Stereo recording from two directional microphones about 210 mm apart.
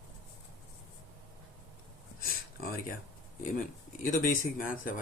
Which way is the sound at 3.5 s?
40° left (ahead or behind).